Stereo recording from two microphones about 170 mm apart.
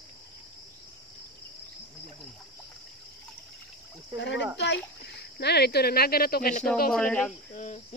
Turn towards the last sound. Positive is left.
turn(degrees=45)  # may be behind; listen again after turning